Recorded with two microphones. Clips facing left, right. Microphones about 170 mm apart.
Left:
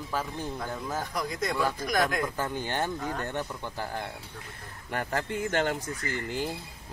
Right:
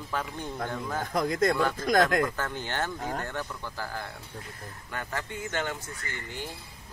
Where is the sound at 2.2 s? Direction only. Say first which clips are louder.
Left 1 dB; 10° left (ahead or behind).